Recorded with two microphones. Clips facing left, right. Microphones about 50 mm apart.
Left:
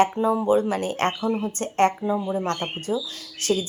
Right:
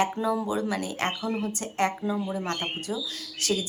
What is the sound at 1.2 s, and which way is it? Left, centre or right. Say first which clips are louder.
Speech: left 5 dB; left.